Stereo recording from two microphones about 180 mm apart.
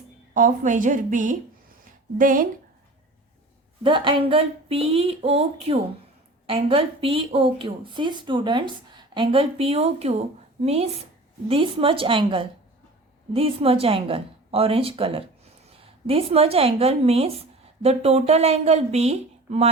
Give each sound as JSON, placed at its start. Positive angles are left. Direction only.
{"t": 0.3, "sound": "a woman's voice", "side_deg": -45}
{"t": 3.8, "sound": "a woman's voice", "side_deg": -30}